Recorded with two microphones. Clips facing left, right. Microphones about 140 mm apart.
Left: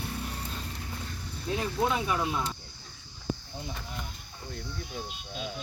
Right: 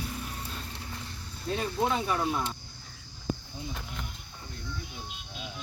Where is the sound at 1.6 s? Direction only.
Centre (ahead or behind).